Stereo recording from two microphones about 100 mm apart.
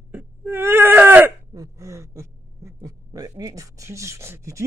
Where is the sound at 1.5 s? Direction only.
35° right (ahead or behind).